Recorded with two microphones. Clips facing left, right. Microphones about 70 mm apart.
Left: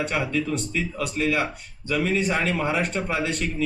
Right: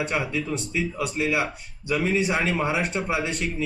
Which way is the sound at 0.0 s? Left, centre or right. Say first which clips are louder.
Left 1 dB; centre.